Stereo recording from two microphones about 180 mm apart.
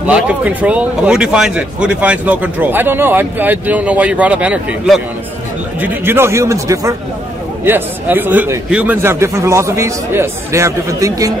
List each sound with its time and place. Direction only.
0.0 s speech: 5° right (ahead or behind)